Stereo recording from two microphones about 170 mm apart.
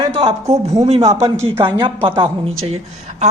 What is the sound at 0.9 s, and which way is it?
A woman's voice, 35° right (ahead or behind).